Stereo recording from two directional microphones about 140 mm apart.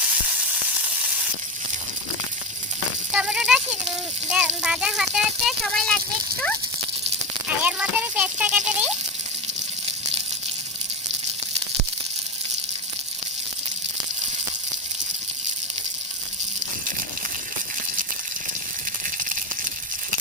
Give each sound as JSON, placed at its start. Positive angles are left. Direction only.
{"t": 0.0, "sound": "sizzle", "side_deg": -10}
{"t": 3.1, "sound": "a sound", "side_deg": -10}
{"t": 4.3, "sound": "speech", "side_deg": -10}
{"t": 7.6, "sound": "a child's voice", "side_deg": -10}
{"t": 9.8, "sound": "water", "side_deg": -45}